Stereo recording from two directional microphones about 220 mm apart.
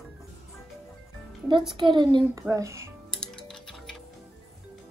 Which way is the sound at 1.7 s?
20° right (ahead or behind).